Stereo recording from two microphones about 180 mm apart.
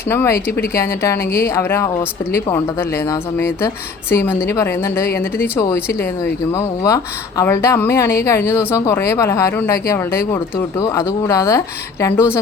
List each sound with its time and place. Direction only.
0.1 s speech: 10° left (ahead or behind)
3.1 s speech: 15° left (ahead or behind)
5.0 s speech: 60° left (ahead or behind)
5.5 s speech: 15° left (ahead or behind)